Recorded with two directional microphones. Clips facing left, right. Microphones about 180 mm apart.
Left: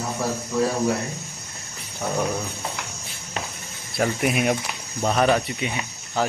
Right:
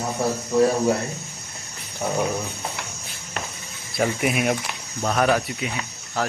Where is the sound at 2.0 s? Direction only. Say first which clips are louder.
Right 1 dB; centre (ahead or behind).